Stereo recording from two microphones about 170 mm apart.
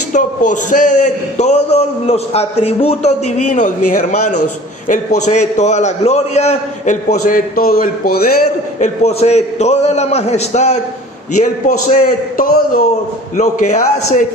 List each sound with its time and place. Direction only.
0.1 s a man's voice: 50° left (ahead or behind)
8.8 s a man's voice: 40° left (ahead or behind)
11.4 s a man's voice: 50° left (ahead or behind)
13.3 s a man's voice: 45° left (ahead or behind)